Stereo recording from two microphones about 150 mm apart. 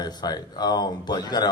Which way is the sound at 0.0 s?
25° left (ahead or behind).